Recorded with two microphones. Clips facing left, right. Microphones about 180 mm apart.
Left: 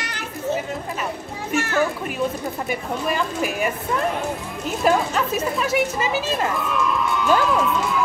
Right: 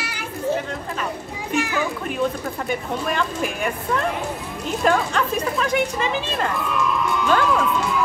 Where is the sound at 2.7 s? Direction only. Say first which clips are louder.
Even; 5° left (ahead or behind).